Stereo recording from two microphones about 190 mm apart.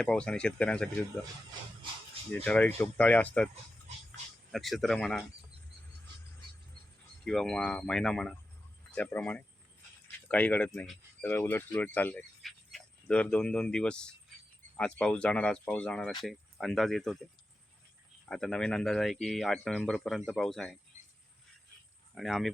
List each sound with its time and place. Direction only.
0.0 s speech: 5° left (ahead or behind)
2.3 s speech: 10° left (ahead or behind)
3.5 s dog: 35° right (ahead or behind)
4.5 s speech: centre (ahead or behind)
7.3 s speech: 5° left (ahead or behind)
18.3 s speech: 5° left (ahead or behind)
22.1 s speech: centre (ahead or behind)